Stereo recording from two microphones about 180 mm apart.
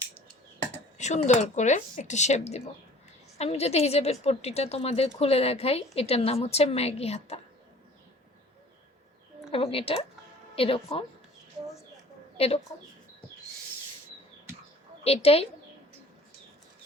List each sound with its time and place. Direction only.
0.9 s a woman's voice: 40° left (ahead or behind)
9.5 s a woman's voice: 30° left (ahead or behind)
12.4 s a woman's voice: 35° left (ahead or behind)
15.0 s a woman's voice: 35° left (ahead or behind)